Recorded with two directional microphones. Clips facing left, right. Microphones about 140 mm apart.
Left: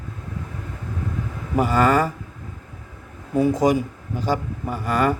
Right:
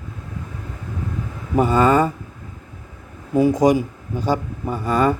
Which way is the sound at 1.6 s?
20° right (ahead or behind).